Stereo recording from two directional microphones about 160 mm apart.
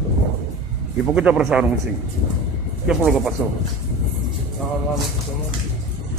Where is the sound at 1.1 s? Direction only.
5° right (ahead or behind).